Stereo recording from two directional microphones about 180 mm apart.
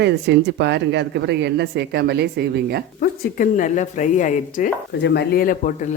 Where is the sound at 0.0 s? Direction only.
70° right (ahead or behind).